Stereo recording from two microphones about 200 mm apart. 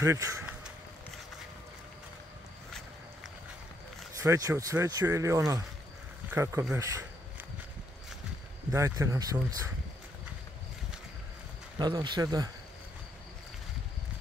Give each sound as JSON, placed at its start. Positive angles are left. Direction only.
{"t": 0.0, "sound": "speech", "side_deg": -15}
{"t": 4.2, "sound": "speech", "side_deg": -15}
{"t": 8.7, "sound": "speech", "side_deg": -15}
{"t": 11.8, "sound": "speech", "side_deg": -20}